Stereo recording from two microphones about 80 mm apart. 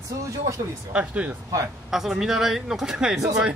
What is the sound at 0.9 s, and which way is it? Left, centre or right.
Speech, centre.